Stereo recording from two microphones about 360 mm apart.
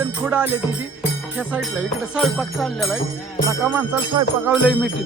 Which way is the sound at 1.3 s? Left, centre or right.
Centre.